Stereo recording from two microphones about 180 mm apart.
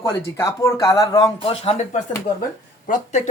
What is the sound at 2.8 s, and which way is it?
Speech, 45° left (ahead or behind).